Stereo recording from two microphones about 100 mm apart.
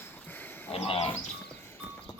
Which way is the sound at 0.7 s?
85° left.